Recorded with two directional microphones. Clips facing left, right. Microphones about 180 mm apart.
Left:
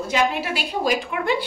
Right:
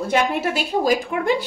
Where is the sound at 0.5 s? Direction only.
45° right (ahead or behind).